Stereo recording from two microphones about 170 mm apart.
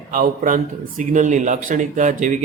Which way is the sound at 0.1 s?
50° right (ahead or behind).